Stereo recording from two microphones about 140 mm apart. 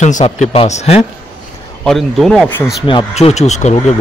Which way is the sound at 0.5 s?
50° left (ahead or behind).